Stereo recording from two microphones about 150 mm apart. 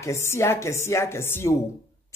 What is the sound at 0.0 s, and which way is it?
A man's voice, 20° left (ahead or behind).